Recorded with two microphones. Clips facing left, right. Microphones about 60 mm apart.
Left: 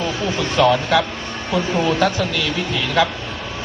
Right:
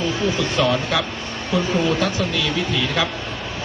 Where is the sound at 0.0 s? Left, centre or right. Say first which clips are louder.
Even; left.